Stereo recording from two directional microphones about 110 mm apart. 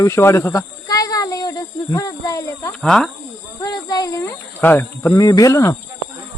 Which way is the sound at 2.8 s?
5° left (ahead or behind).